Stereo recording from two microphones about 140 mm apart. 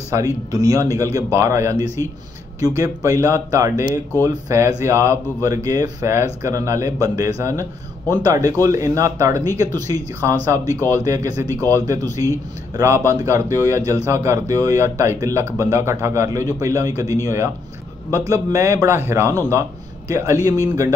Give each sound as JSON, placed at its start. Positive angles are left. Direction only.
{"t": 0.1, "sound": "a man's voice", "side_deg": -25}